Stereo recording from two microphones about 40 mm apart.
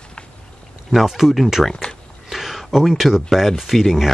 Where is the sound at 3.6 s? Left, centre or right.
Centre.